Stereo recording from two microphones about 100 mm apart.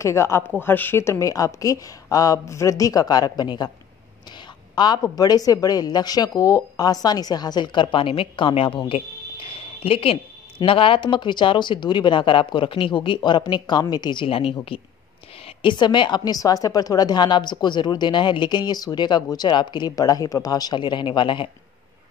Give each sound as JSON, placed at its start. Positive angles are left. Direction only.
{"t": 0.0, "sound": "a woman's voice", "side_deg": 30}
{"t": 4.7, "sound": "speech", "side_deg": 45}
{"t": 14.2, "sound": "speech", "side_deg": 65}
{"t": 15.4, "sound": "speech", "side_deg": 55}